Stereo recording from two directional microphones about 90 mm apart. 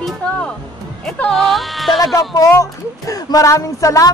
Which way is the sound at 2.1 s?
40° left (ahead or behind).